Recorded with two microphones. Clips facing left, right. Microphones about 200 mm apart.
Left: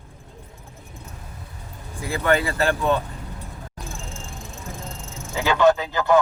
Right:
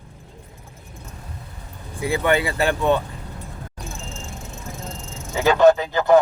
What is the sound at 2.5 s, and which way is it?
Speech, 15° right (ahead or behind).